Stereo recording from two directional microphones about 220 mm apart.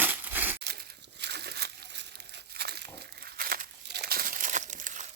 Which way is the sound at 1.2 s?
50° right (ahead or behind).